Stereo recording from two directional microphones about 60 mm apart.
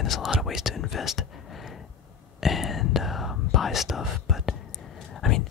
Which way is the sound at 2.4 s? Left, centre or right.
Centre.